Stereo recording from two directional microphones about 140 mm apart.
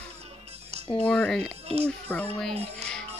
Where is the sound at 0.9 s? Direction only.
10° left (ahead or behind).